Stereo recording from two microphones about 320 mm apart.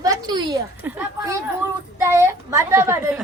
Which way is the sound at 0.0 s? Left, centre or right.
Centre.